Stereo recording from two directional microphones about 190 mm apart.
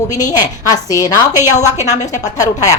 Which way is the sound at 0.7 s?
20° left (ahead or behind).